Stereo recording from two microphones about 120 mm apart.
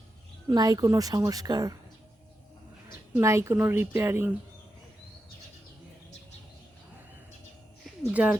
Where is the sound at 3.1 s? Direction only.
25° right (ahead or behind).